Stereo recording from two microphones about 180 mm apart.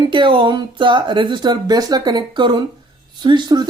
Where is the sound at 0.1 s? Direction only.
25° right (ahead or behind).